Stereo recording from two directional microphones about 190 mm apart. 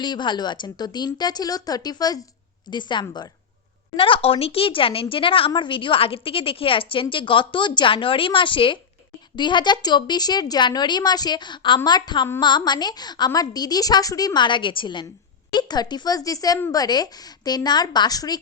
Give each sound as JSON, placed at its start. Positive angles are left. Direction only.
{"t": 0.0, "sound": "a woman's voice", "side_deg": 25}